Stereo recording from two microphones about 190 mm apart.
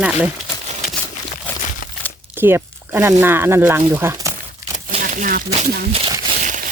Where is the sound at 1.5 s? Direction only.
10° left (ahead or behind).